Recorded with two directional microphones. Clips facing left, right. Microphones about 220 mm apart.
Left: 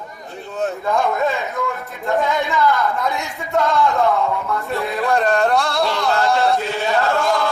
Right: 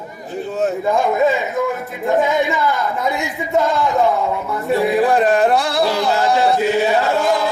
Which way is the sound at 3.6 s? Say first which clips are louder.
Right 1 dB; 15° right (ahead or behind).